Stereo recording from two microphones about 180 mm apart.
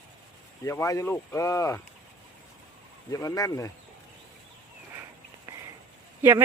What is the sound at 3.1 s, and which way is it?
Speech, 20° left (ahead or behind).